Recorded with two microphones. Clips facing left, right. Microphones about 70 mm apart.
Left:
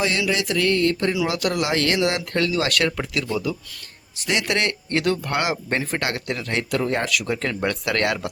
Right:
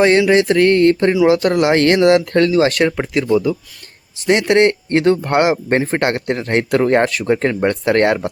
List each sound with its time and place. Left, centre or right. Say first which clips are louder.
0.0 s speech: right 11 dB; right
2.5 s speech: right 8 dB; right